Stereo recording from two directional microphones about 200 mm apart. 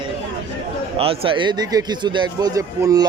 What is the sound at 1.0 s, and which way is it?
A man's voice, 25° right (ahead or behind).